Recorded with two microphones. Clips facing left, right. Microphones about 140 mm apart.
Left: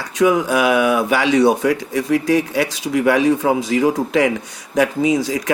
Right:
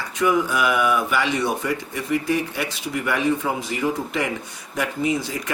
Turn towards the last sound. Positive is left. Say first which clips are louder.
# left 6 dB
turn(degrees=90)